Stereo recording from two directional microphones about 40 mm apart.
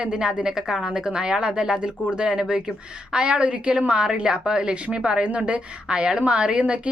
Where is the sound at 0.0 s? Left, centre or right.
Right.